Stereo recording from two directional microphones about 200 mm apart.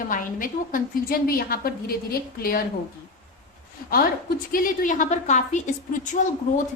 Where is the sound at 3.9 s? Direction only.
45° left (ahead or behind).